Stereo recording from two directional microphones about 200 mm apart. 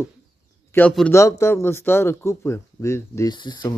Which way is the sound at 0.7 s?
10° left (ahead or behind).